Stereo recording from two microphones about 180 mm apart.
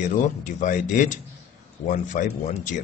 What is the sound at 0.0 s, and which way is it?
Speech, 45° left (ahead or behind).